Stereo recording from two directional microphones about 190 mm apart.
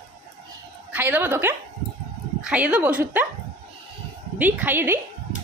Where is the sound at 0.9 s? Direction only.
10° right (ahead or behind).